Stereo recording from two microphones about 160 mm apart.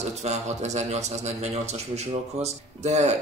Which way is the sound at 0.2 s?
45° right (ahead or behind).